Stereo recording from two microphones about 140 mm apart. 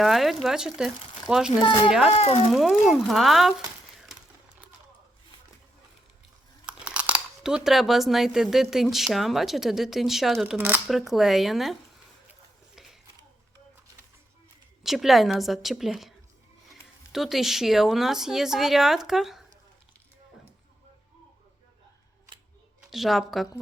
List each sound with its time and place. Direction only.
0.0 s a woman's voice: centre (ahead or behind)
1.6 s speech: 35° left (ahead or behind)
2.5 s a woman's voice: centre (ahead or behind)
6.7 s speech: 10° right (ahead or behind)
10.4 s speech: 10° right (ahead or behind)
10.8 s a woman's voice: centre (ahead or behind)
12.3 s a sound: 5° right (ahead or behind)
14.8 s a woman's voice: centre (ahead or behind)
22.9 s a woman's voice: centre (ahead or behind)